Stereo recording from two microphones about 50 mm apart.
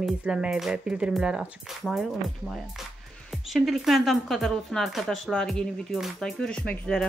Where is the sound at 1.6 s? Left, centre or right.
Centre.